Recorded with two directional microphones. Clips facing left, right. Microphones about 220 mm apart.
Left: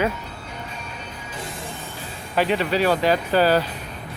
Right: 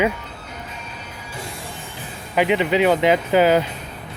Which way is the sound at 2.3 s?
15° right (ahead or behind).